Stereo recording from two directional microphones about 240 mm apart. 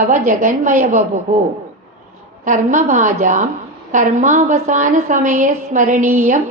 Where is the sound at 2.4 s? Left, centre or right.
Right.